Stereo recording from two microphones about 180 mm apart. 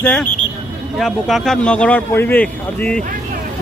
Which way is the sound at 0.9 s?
Centre (ahead or behind).